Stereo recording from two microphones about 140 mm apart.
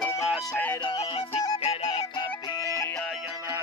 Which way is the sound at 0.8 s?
45° left (ahead or behind).